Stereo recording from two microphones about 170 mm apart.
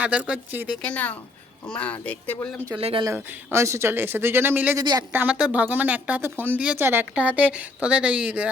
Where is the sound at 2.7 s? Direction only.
35° right (ahead or behind).